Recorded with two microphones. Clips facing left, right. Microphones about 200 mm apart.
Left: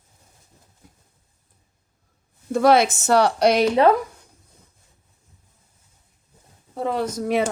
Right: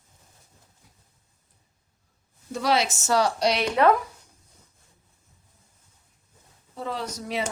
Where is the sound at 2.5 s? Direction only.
50° left (ahead or behind).